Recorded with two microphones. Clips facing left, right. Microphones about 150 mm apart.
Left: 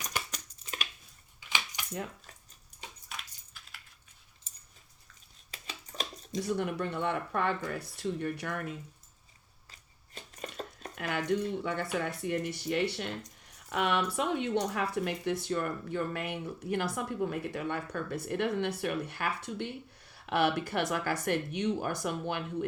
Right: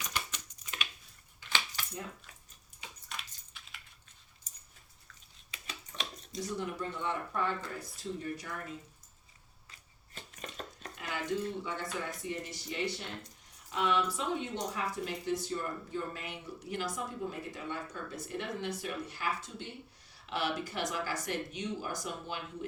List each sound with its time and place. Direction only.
0.1 s a sound: 40° left (ahead or behind)
1.4 s keys jangling: 15° left (ahead or behind)
3.1 s coin: centre (ahead or behind)
4.5 s keys jangling: 30° left (ahead or behind)
5.5 s a sound: 40° left (ahead or behind)
6.6 s speech: 65° left (ahead or behind)
10.4 s dishes: 35° left (ahead or behind)
10.9 s a sound: 60° left (ahead or behind)
11.3 s speech: 60° left (ahead or behind)